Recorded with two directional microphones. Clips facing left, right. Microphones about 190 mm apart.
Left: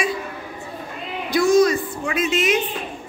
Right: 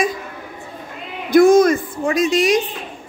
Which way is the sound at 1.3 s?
50° right (ahead or behind).